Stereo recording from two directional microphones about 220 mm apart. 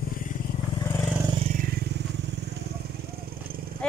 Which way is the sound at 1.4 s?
40° right (ahead or behind).